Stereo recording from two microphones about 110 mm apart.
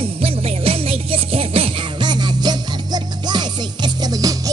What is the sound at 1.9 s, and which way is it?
Music, 40° right (ahead or behind).